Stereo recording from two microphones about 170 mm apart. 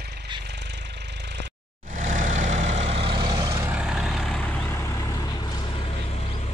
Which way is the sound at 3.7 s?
5° right (ahead or behind).